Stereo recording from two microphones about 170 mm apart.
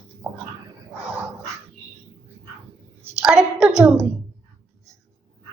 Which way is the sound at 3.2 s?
Centre (ahead or behind).